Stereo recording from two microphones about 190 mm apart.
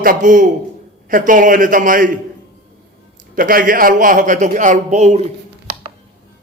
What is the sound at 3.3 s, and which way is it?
A man's voice, 45° right (ahead or behind).